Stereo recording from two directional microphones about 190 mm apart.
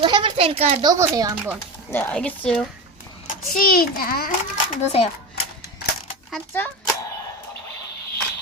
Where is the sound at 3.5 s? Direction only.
50° left (ahead or behind).